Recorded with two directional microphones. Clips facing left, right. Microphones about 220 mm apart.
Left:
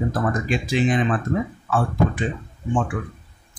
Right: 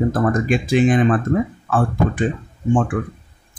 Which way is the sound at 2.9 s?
50° right (ahead or behind).